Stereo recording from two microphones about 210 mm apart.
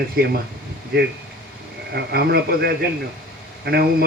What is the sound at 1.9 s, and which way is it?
Speech, 50° right (ahead or behind).